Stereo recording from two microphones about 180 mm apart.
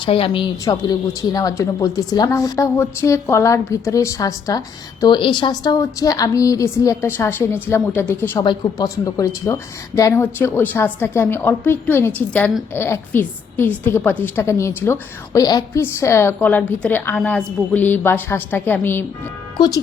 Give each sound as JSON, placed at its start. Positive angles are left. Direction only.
{"t": 0.0, "sound": "a woman's voice", "side_deg": 30}
{"t": 19.5, "sound": "a woman's voice", "side_deg": 25}